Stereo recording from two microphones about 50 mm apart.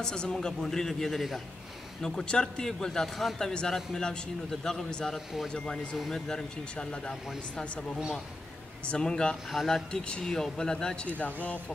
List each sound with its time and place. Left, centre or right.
0.0 s a man's voice: centre
2.0 s a man's voice: centre
8.9 s a man's voice: centre
9.5 s speech: centre
9.8 s a man's voice: centre